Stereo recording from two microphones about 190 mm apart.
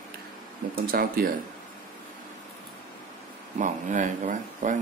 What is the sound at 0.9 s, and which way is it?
Speech, 50° right (ahead or behind).